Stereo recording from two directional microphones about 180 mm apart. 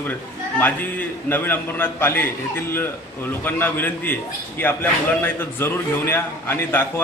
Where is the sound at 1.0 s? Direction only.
10° left (ahead or behind).